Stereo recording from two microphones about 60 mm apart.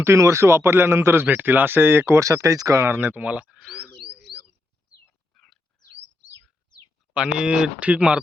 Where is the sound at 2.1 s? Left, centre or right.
Right.